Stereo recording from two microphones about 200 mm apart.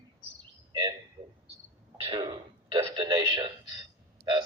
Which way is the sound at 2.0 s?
25° right (ahead or behind).